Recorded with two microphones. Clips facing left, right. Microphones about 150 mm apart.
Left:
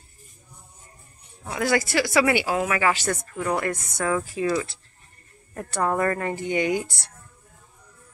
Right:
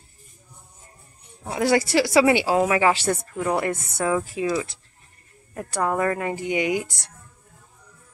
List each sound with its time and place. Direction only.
1.4 s speech: 30° right (ahead or behind)
2.0 s speech: 15° right (ahead or behind)
2.3 s a woman's voice: 25° right (ahead or behind)
3.1 s speech: 15° right (ahead or behind)